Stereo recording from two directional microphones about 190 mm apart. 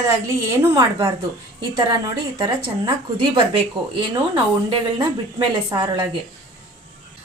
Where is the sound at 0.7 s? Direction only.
20° right (ahead or behind).